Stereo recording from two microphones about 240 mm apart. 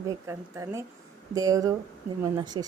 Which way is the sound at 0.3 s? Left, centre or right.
Centre.